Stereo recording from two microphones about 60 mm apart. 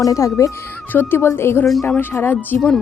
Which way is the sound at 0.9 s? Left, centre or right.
Left.